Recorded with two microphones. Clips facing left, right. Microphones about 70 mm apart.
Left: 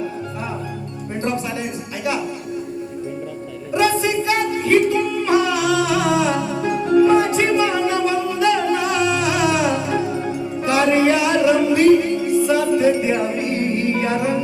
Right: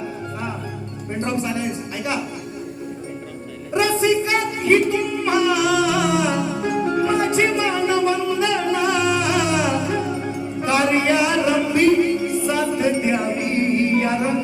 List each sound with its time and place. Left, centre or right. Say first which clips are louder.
1.2 s speech: even; right
3.8 s a sound: even; right
10.6 s music: left 3 dB; right